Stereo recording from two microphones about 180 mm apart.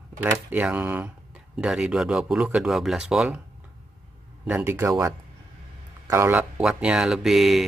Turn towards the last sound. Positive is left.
turn(degrees=0)  # may be behind; listen again after turning